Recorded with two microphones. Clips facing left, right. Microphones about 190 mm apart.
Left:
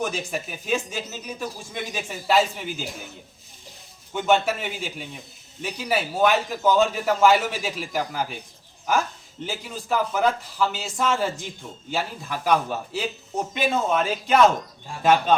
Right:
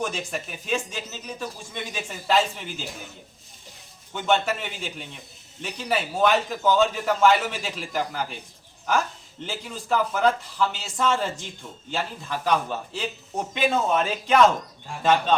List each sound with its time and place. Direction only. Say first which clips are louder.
0.0 s speech: left 2 dB; 5° left (ahead or behind)
4.1 s speech: left 2 dB; 10° left (ahead or behind)
9.5 s a man's voice: right 1 dB; 5° left (ahead or behind)